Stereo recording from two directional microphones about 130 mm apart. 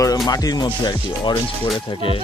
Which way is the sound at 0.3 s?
30° left (ahead or behind).